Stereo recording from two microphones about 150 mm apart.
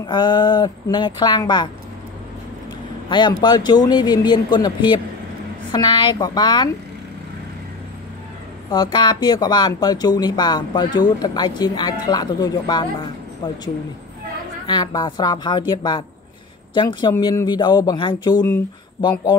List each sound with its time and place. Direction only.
0.0 s speech: 30° left (ahead or behind)
3.1 s speech: 30° left (ahead or behind)
8.9 s speech: 30° left (ahead or behind)
14.7 s speech: 25° left (ahead or behind)